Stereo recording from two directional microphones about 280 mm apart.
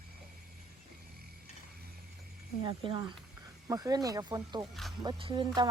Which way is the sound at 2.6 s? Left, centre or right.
Centre.